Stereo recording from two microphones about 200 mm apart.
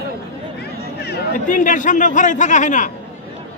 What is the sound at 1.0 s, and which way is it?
Speech, 50° left (ahead or behind).